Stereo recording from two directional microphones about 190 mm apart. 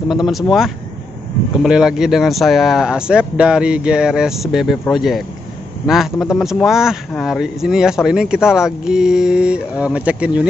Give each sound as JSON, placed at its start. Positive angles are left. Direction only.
{"t": 0.1, "sound": "speech", "side_deg": 0}